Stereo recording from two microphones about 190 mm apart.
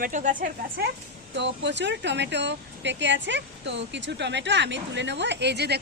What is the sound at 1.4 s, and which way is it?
Speech, 70° right (ahead or behind).